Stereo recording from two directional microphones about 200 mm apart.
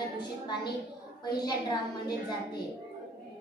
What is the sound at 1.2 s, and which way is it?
A woman's voice, 20° left (ahead or behind).